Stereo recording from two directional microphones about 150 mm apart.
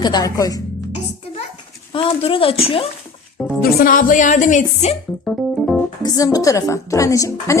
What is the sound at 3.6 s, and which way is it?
Speech, 70° left (ahead or behind).